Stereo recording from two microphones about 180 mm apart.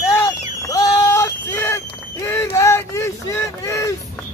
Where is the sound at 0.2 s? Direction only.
20° left (ahead or behind).